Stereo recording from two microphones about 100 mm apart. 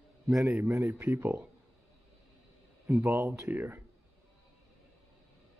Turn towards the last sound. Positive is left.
turn(degrees=-20)  # may be behind; listen again after turning